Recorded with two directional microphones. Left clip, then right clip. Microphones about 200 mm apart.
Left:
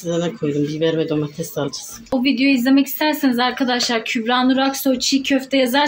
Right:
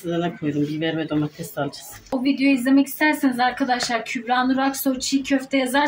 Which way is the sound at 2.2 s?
20° left (ahead or behind).